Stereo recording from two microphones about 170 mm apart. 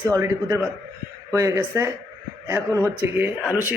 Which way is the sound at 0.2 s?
15° right (ahead or behind).